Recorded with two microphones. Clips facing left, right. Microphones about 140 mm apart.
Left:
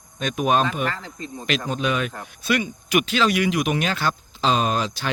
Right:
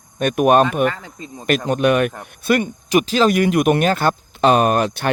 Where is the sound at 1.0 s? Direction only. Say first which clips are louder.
Even; 20° right (ahead or behind).